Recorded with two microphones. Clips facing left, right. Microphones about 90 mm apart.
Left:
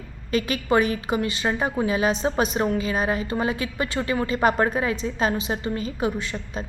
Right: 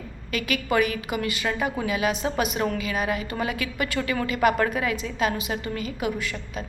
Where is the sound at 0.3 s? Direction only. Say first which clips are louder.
Left 3 dB; 30° left (ahead or behind).